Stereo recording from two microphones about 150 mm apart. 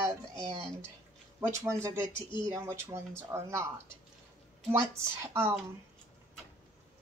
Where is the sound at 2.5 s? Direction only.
20° right (ahead or behind).